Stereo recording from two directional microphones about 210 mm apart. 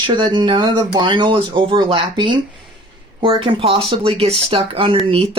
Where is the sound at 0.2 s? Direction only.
20° right (ahead or behind).